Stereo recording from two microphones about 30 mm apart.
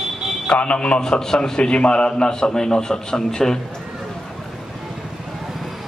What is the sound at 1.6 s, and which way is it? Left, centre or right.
A man's voice, left.